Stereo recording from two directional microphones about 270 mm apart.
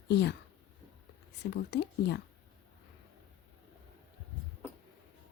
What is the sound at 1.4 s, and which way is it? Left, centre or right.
Speech, left.